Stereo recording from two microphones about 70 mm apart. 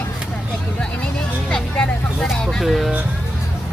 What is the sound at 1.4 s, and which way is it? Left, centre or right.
Speech, centre.